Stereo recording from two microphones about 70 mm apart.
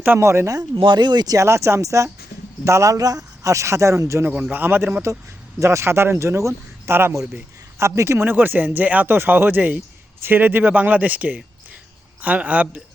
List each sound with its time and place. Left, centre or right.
0.2 s speech: right
0.5 s speech: right
1.4 s speech: right
4.3 s speech: right
5.5 s speech: right
8.2 s speech: right